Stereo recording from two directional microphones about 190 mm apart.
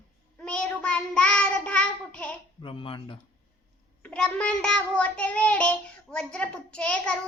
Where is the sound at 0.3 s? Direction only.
5° left (ahead or behind).